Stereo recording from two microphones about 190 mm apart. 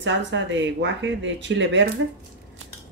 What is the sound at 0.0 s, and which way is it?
Speech, 75° right (ahead or behind).